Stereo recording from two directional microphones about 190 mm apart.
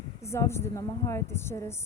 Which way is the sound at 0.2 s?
15° left (ahead or behind).